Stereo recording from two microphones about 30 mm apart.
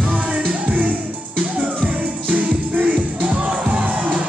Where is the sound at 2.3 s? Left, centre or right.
Right.